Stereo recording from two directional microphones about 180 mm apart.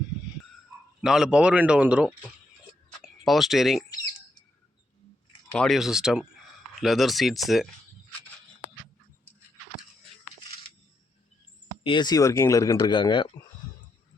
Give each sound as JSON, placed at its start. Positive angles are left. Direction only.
{"t": 1.0, "sound": "speech", "side_deg": -5}
{"t": 5.5, "sound": "speech", "side_deg": 5}
{"t": 11.8, "sound": "speech", "side_deg": 25}